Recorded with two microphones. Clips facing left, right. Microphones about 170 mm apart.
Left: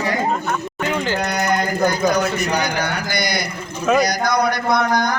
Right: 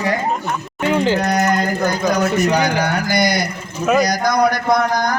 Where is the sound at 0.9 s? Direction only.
30° right (ahead or behind).